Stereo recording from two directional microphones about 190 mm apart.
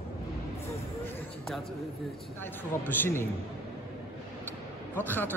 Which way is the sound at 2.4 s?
10° left (ahead or behind).